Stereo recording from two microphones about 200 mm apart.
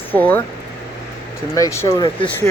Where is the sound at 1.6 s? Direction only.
15° left (ahead or behind).